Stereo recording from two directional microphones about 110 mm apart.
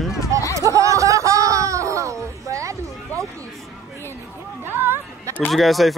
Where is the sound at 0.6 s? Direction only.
30° right (ahead or behind).